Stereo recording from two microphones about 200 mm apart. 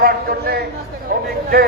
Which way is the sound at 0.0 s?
50° right (ahead or behind).